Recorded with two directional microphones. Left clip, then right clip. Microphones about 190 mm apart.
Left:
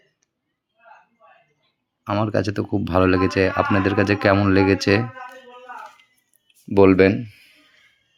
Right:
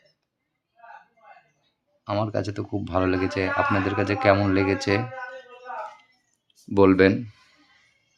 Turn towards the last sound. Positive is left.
turn(degrees=15)  # may be behind; listen again after turning